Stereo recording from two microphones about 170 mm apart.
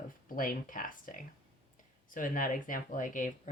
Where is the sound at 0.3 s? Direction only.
55° left (ahead or behind).